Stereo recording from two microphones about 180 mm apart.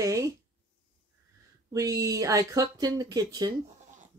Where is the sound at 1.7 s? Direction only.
20° right (ahead or behind).